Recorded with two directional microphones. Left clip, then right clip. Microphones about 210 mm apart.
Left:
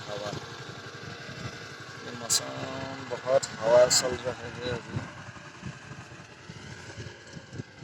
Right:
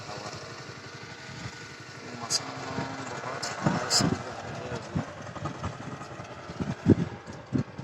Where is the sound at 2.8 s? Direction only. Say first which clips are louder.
Even; 25° left (ahead or behind).